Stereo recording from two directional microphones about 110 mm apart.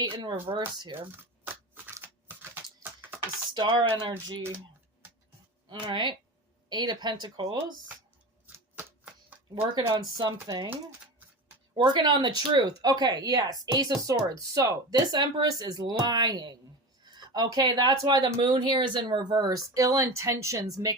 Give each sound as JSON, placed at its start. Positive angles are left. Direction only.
{"t": 0.0, "sound": "speech", "side_deg": -45}
{"t": 1.5, "sound": "a sound", "side_deg": -20}
{"t": 3.5, "sound": "speech", "side_deg": -40}
{"t": 5.6, "sound": "speech", "side_deg": -45}
{"t": 8.5, "sound": "a sound", "side_deg": -15}
{"t": 9.8, "sound": "speech", "side_deg": -40}
{"t": 11.7, "sound": "speech", "side_deg": -45}